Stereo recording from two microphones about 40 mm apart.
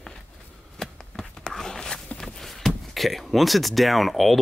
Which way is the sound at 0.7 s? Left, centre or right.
Centre.